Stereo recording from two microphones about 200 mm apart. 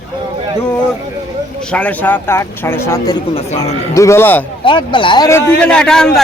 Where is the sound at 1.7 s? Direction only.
5° left (ahead or behind).